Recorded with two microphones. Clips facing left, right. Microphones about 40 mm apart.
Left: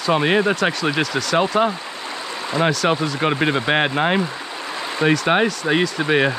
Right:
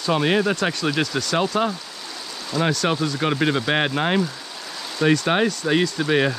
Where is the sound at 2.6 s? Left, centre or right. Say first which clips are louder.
Left 3 dB; left.